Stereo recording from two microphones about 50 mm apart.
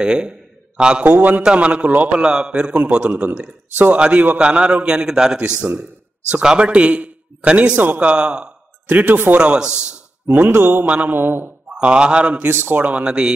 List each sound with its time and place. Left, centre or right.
0.0 s a sound: centre
1.0 s a man's voice: right
2.1 s a man's voice: centre
8.8 s speech: right
9.3 s a man's voice: right
10.3 s speech: right
10.9 s a man's voice: right
11.1 s speech: right
11.7 s a man's voice: right
12.4 s speech: right
12.7 s a man's voice: right